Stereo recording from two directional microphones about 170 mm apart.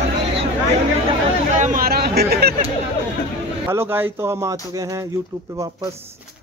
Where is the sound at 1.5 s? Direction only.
50° right (ahead or behind); by 2.5 s 70° right (ahead or behind).